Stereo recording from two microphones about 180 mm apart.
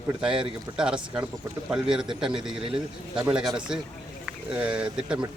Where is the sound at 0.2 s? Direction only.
5° right (ahead or behind).